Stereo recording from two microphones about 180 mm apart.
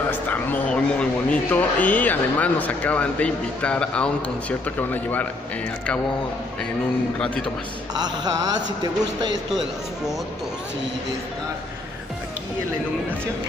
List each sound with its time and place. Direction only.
0.1 s speech: 10° left (ahead or behind)
7.2 s speech: 5° left (ahead or behind)
7.9 s mantra: 20° right (ahead or behind)